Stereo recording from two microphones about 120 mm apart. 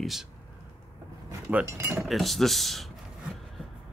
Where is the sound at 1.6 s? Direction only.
20° right (ahead or behind).